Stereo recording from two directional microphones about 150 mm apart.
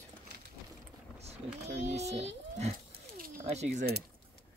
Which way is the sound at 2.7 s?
75° right (ahead or behind).